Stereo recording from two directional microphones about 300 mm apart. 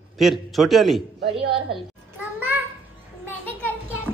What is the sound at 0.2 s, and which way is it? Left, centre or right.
Speech, centre.